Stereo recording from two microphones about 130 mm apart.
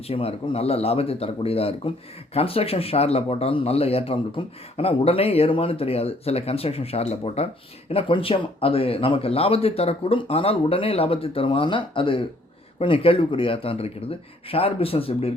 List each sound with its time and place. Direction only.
0.0 s speech: 50° left (ahead or behind)